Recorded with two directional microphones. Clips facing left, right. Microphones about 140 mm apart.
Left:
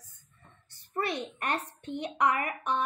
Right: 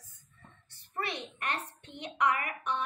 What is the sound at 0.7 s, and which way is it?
A child's voice, 45° left (ahead or behind).